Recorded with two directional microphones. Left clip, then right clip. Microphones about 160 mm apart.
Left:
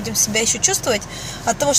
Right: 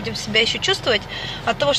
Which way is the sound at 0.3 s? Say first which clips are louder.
Right 5 dB; 20° left (ahead or behind).